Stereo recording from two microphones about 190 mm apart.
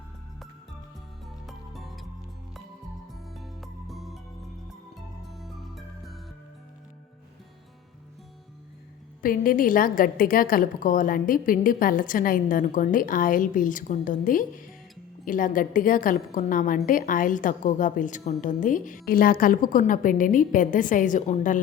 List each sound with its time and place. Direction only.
1.5 s music: centre (ahead or behind)
3.3 s music: centre (ahead or behind)
5.2 s music: centre (ahead or behind)
9.2 s a woman's voice: 45° left (ahead or behind)